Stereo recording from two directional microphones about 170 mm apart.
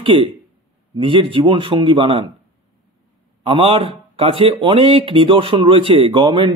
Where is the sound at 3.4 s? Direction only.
35° right (ahead or behind).